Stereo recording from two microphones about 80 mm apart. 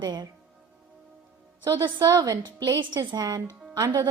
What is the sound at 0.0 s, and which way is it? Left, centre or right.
Speech, right.